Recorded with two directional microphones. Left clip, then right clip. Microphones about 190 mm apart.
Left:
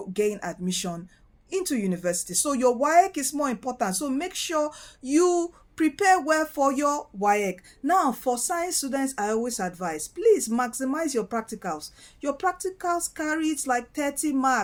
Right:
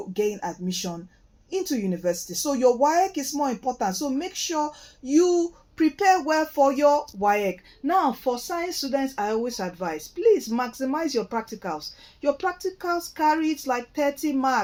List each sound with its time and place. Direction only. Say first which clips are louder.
0.1 s speech: even; 30° left (ahead or behind)